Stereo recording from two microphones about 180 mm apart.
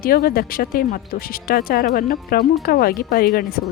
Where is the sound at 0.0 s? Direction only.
55° left (ahead or behind).